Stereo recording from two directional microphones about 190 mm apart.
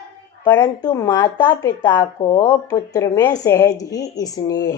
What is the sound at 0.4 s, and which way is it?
Speech, 10° left (ahead or behind).